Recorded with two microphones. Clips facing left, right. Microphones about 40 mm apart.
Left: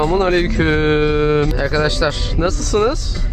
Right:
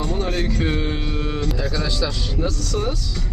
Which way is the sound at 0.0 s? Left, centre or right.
Left.